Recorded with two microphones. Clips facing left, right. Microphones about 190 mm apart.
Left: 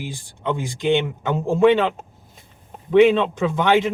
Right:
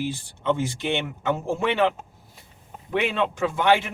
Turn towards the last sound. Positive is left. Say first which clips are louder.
# left 3 dB
turn(degrees=20)  # may be behind; listen again after turning